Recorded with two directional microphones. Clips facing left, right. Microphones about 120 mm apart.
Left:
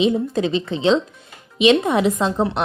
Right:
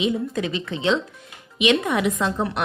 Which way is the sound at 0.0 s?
30° left (ahead or behind).